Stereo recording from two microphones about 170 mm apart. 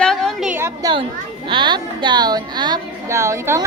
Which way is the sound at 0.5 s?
15° right (ahead or behind).